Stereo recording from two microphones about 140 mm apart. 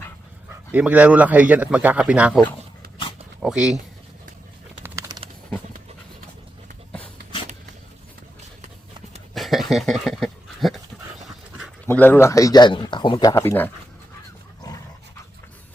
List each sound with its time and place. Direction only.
0.7 s a man's voice: 10° right (ahead or behind)
3.4 s speech: 5° right (ahead or behind)
4.8 s bird: 25° right (ahead or behind)
9.3 s dog: centre (ahead or behind)
11.9 s a man's voice: 15° left (ahead or behind); by 13.3 s 35° left (ahead or behind)
13.3 s speech: 15° left (ahead or behind)